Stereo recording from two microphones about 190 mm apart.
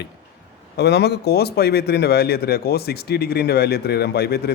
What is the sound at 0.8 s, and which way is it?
A man's voice, 60° left (ahead or behind).